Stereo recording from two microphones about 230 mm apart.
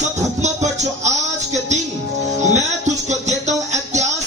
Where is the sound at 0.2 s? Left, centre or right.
Right.